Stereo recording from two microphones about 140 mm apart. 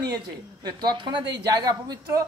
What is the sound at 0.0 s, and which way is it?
Speech, 30° right (ahead or behind).